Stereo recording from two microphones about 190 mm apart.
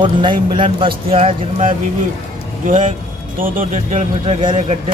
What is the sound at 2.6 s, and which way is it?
Speech, 40° right (ahead or behind).